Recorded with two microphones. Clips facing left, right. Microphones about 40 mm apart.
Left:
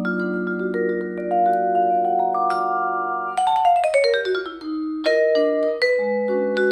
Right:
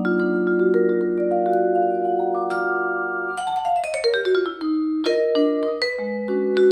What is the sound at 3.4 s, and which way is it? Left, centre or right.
Music, left.